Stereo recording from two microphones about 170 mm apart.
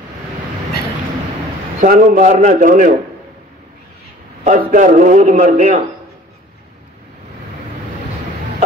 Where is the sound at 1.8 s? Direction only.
50° right (ahead or behind).